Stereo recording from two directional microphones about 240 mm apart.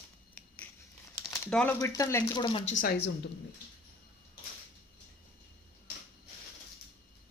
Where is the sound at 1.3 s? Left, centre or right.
Centre; by 2.7 s left.